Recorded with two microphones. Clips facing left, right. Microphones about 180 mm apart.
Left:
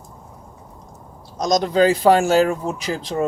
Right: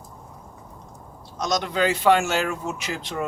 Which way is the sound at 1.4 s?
35° left (ahead or behind).